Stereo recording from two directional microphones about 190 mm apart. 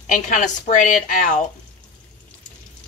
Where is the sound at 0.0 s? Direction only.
40° left (ahead or behind).